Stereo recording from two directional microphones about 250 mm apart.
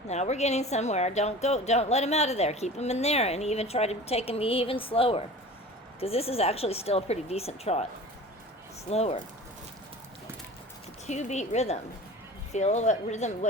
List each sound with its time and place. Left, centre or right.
0.1 s a woman's voice: left
8.9 s a woman's voice: left
11.0 s a woman's voice: left